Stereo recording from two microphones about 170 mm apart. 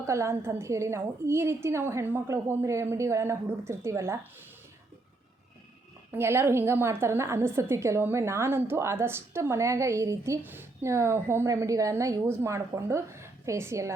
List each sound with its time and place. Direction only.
0.0 s a woman's voice: 15° right (ahead or behind)
6.1 s a woman's voice: 15° right (ahead or behind)